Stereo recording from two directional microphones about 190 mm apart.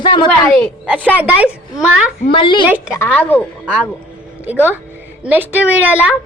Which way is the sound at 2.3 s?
25° left (ahead or behind).